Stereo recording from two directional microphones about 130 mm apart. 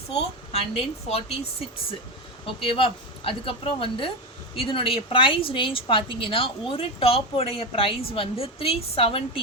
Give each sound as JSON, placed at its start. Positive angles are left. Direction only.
{"t": 0.2, "sound": "speech", "side_deg": 45}
{"t": 2.6, "sound": "speech", "side_deg": 45}